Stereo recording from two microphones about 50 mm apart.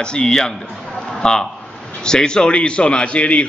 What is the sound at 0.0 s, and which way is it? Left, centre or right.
A man's voice, centre.